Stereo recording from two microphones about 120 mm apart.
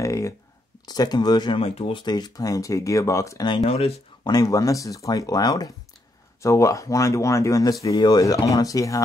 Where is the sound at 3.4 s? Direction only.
50° left (ahead or behind).